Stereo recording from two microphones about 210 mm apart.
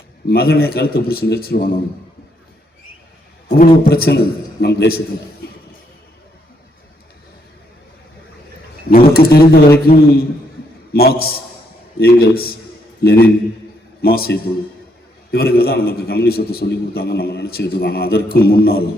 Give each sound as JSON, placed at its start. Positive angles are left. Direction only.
{"t": 0.3, "sound": "a man's voice", "side_deg": 45}
{"t": 3.5, "sound": "a man's voice", "side_deg": 45}
{"t": 9.1, "sound": "a man's voice", "side_deg": 45}